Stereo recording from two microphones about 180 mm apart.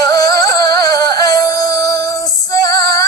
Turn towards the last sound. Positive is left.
turn(degrees=20)  # may be behind; listen again after turning